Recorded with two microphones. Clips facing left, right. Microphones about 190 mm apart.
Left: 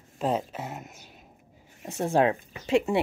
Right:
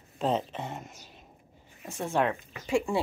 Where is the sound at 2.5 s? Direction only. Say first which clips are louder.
Left 4 dB; 20° left (ahead or behind).